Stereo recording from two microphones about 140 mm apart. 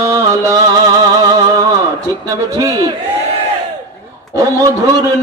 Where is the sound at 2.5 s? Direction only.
25° right (ahead or behind).